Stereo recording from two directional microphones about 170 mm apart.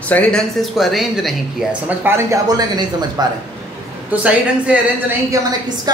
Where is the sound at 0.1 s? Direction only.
5° left (ahead or behind); by 3.3 s 25° right (ahead or behind).